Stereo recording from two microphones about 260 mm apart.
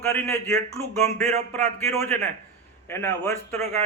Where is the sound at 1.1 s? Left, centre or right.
Right.